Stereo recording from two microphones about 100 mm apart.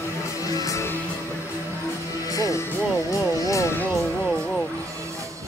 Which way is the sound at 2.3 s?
35° left (ahead or behind).